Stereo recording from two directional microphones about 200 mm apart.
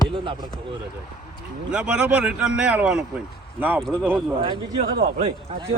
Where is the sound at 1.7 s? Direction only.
5° right (ahead or behind).